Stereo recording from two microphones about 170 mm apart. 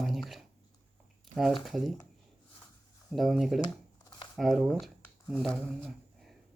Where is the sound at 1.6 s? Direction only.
Centre (ahead or behind).